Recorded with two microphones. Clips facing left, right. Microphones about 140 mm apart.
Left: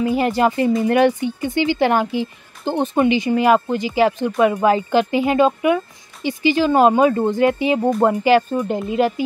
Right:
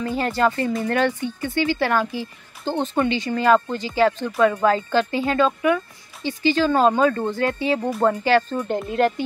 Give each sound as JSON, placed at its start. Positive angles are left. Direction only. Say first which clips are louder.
{"t": 0.0, "sound": "speech", "louder": "left 4 dB", "side_deg": 15}